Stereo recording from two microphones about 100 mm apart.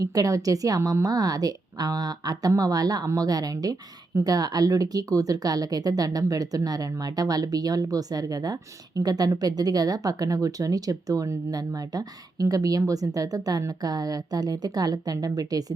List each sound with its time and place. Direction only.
0.0 s speech: 35° right (ahead or behind)